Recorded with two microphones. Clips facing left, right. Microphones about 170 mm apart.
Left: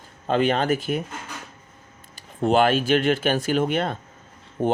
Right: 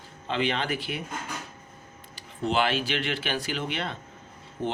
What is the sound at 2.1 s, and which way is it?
Speech, 50° left (ahead or behind).